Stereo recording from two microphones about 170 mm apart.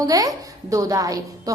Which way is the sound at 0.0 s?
20° right (ahead or behind).